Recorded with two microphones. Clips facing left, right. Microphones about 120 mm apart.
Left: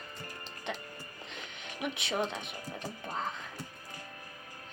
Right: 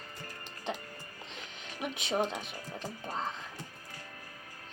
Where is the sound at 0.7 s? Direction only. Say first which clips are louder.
Right 2 dB; 35° right (ahead or behind).